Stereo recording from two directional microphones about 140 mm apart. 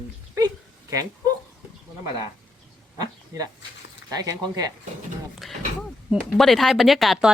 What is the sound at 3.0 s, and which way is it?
Speech, 25° right (ahead or behind).